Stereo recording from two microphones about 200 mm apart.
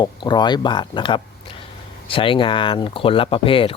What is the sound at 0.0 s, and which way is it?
Speech, 20° left (ahead or behind).